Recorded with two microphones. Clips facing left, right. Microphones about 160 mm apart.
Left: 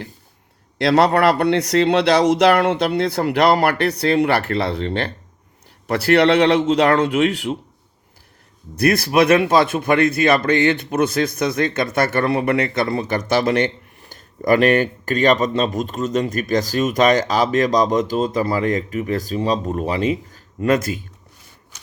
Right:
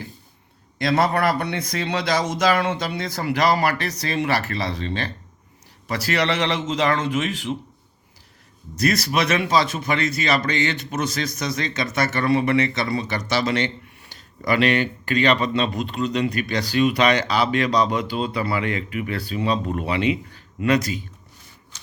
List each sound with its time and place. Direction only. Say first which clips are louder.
0.8 s speech: left 5 dB; 70° left (ahead or behind)
8.8 s a man's voice: left 6 dB; 55° left (ahead or behind)